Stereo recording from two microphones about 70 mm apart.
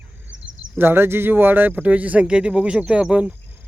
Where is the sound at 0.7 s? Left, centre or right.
Right.